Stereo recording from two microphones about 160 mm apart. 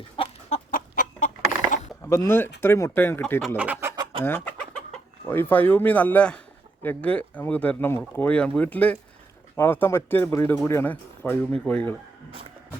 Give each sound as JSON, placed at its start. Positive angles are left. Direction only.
{"t": 0.2, "sound": "chicken", "side_deg": 35}
{"t": 0.5, "sound": "chicken", "side_deg": 50}
{"t": 2.0, "sound": "speech", "side_deg": 15}
{"t": 3.6, "sound": "chicken", "side_deg": -10}
{"t": 4.2, "sound": "speech", "side_deg": 10}